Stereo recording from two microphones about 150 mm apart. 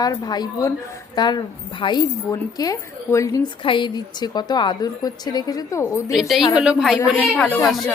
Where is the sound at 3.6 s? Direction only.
35° left (ahead or behind).